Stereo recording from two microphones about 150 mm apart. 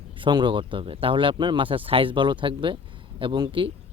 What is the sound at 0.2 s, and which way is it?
Speech, 30° right (ahead or behind).